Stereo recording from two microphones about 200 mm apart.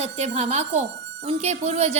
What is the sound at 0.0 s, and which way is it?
A woman's voice, 35° right (ahead or behind).